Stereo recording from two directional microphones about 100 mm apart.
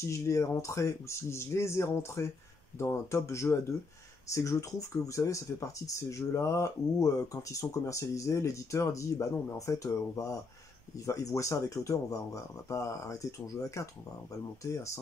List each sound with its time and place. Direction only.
0.0 s speech: 30° left (ahead or behind)